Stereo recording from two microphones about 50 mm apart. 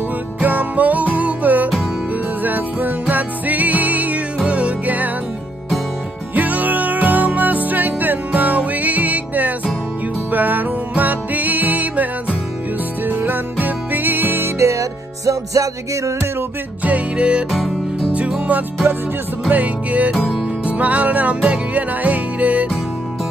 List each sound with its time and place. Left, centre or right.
0.4 s music: right
6.3 s music: right
14.6 s music: right
16.8 s music: right
17.5 s music: centre
18.1 s music: right
20.2 s music: centre
20.4 s music: right